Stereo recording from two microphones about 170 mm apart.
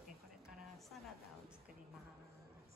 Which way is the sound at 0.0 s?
Centre (ahead or behind).